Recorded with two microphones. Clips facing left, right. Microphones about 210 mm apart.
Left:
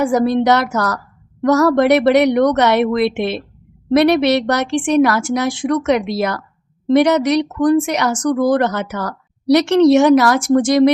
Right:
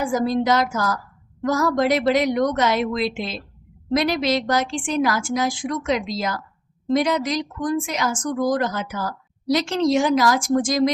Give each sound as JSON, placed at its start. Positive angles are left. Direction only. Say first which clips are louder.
{"t": 0.0, "sound": "a woman's voice", "louder": "left 6 dB", "side_deg": 65}